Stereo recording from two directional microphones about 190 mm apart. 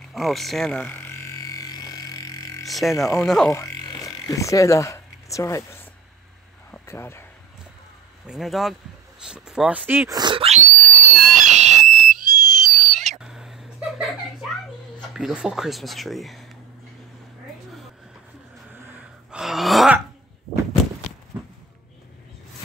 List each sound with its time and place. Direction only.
0.1 s frog: centre (ahead or behind); by 2.6 s 20° left (ahead or behind)
2.6 s speech: centre (ahead or behind)
3.5 s a sound: 20° left (ahead or behind)
8.3 s speech: centre (ahead or behind)
10.1 s speech: 25° right (ahead or behind)
10.8 s fireworks: centre (ahead or behind)
13.2 s a sound: 5° right (ahead or behind)
15.0 s speech: 5° right (ahead or behind)
19.3 s groan: centre (ahead or behind)